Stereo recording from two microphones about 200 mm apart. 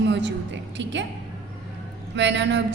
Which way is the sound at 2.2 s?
65° right (ahead or behind).